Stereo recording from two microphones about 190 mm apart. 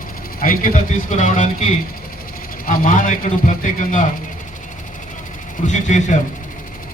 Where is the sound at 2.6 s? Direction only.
45° left (ahead or behind).